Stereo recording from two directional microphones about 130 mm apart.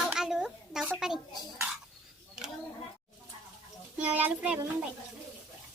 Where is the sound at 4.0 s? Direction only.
10° right (ahead or behind).